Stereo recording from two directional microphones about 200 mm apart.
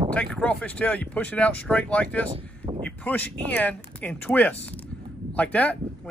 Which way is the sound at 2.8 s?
5° left (ahead or behind).